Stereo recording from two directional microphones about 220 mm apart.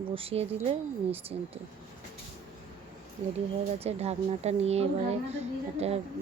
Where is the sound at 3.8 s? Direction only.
30° right (ahead or behind).